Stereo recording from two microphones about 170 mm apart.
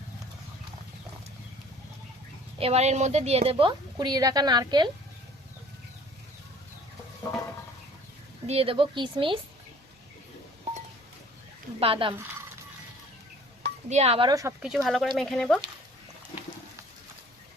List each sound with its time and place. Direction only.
2.6 s a woman's voice: 35° right (ahead or behind)
8.4 s a woman's voice: 35° right (ahead or behind)
11.8 s a woman's voice: 30° right (ahead or behind)
13.6 s dishes: 40° right (ahead or behind)
14.3 s speech: 20° right (ahead or behind)
14.6 s speech: centre (ahead or behind)